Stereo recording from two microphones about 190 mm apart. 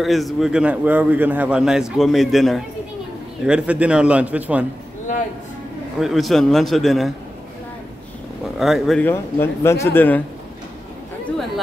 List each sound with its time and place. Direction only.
0.0 s a man's voice: centre (ahead or behind)
5.1 s speech: 40° left (ahead or behind)
5.9 s a man's voice: centre (ahead or behind)
8.5 s a man's voice: centre (ahead or behind)